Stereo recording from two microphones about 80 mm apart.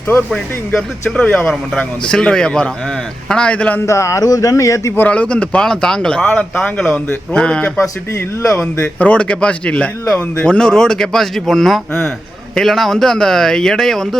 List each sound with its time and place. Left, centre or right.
0.3 s speech: centre
3.8 s speech: left
4.9 s speech: centre
7.8 s speech: left
8.8 s speech: centre